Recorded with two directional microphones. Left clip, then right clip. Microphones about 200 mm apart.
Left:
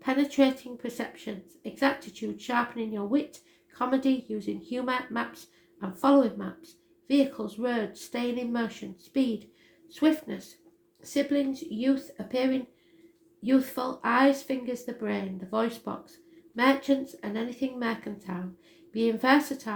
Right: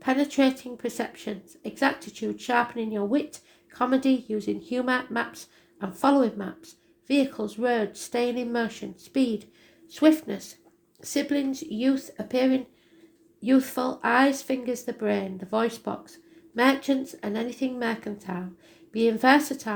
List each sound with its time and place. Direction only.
0.0 s speech: 35° right (ahead or behind)